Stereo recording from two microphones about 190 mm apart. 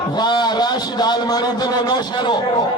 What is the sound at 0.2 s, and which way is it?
A man's voice, 20° left (ahead or behind).